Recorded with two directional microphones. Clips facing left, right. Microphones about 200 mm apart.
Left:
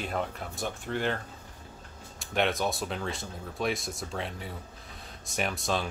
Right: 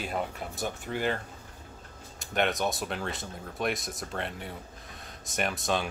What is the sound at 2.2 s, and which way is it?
A man's voice, centre (ahead or behind).